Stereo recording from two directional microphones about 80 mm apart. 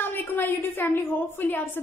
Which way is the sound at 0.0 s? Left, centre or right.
Left.